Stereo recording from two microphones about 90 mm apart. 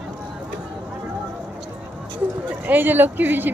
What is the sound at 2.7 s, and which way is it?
Speech, 20° right (ahead or behind).